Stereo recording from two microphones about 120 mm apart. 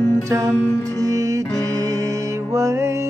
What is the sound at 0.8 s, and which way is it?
Music, 30° right (ahead or behind).